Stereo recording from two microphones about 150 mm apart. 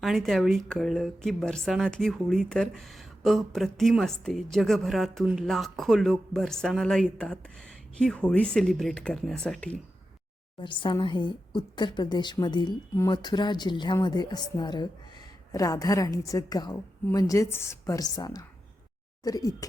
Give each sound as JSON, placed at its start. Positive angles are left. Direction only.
{"t": 0.0, "sound": "speech", "side_deg": 0}
{"t": 10.6, "sound": "a woman's voice", "side_deg": 35}